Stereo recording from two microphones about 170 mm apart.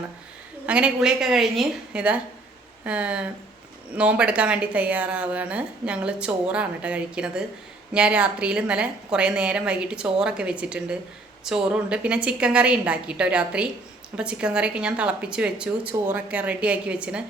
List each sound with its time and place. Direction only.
0.6 s a woman's voice: 5° right (ahead or behind)